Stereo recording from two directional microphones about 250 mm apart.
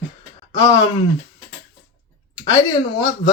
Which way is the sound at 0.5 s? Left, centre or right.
Centre.